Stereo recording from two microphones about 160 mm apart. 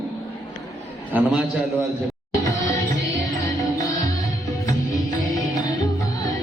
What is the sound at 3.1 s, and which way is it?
Music, 20° left (ahead or behind).